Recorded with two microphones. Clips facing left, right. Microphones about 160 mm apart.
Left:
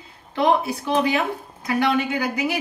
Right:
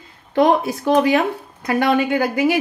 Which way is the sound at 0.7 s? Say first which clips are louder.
Right 6 dB; 45° right (ahead or behind).